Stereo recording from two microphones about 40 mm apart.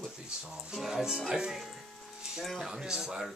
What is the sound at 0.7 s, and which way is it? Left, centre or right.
Speech, centre.